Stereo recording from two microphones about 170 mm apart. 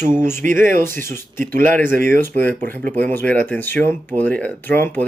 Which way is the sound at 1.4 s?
55° right (ahead or behind).